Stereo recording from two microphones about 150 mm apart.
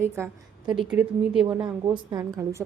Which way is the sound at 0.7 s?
5° right (ahead or behind).